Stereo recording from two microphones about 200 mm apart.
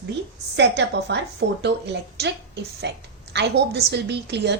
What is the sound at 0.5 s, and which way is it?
A woman's voice, 60° right (ahead or behind).